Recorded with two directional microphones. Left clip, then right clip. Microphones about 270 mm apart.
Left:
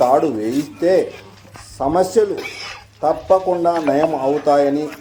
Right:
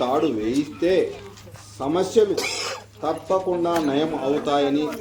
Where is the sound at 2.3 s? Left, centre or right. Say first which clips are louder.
Right 1 dB; right.